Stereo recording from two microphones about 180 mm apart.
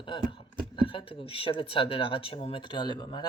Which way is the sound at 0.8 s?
30° left (ahead or behind).